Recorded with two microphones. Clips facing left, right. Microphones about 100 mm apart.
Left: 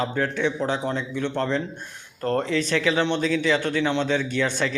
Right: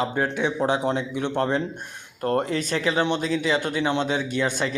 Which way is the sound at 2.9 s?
15° right (ahead or behind).